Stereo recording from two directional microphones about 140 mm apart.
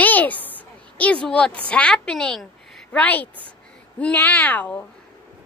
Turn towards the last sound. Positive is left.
turn(degrees=10)  # may be behind; listen again after turning